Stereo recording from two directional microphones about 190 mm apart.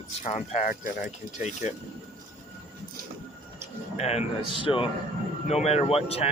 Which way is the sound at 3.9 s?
35° left (ahead or behind).